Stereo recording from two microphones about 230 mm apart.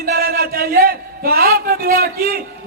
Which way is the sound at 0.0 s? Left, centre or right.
Right.